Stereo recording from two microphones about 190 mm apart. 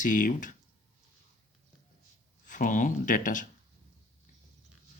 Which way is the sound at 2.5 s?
45° left (ahead or behind).